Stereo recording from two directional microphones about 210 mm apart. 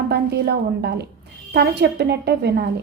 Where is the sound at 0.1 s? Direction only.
50° right (ahead or behind).